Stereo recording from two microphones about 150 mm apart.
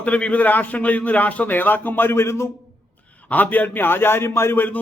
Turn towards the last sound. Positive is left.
turn(degrees=15)  # may be behind; listen again after turning